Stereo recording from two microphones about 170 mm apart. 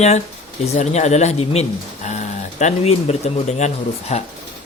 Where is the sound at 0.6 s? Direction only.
40° left (ahead or behind).